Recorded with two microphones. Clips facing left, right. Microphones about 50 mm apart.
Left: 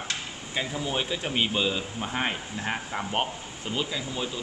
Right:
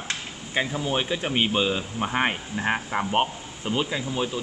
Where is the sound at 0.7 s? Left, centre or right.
Centre.